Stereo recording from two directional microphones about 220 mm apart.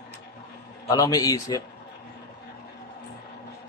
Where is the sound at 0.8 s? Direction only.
15° left (ahead or behind).